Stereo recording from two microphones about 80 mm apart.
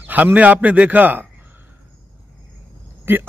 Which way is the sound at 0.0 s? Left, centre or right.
Right.